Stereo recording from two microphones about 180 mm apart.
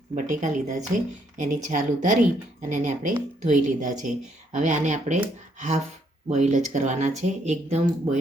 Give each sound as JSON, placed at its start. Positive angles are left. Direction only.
{"t": 0.1, "sound": "speech", "side_deg": -40}